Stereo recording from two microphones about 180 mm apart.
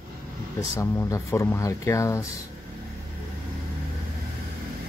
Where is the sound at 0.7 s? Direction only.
15° left (ahead or behind).